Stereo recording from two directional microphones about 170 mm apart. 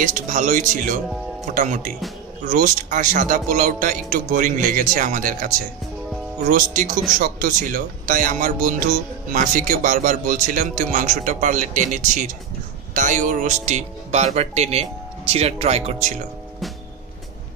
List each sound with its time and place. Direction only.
0.0 s speech: 50° right (ahead or behind)
6.5 s speech: 50° right (ahead or behind)